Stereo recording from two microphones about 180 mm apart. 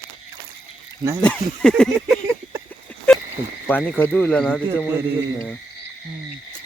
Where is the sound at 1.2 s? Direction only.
5° left (ahead or behind).